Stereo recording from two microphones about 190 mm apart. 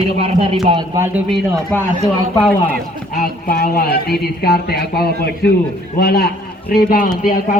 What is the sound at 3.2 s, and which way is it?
Speech, 50° left (ahead or behind).